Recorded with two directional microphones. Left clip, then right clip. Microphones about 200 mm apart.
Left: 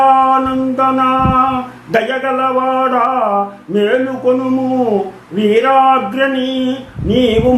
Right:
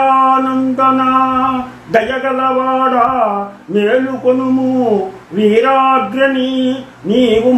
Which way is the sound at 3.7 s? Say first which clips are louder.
Right 1 dB; 15° left (ahead or behind).